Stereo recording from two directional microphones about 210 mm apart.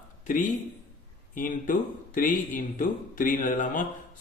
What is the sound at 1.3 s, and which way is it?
Speech, 40° left (ahead or behind).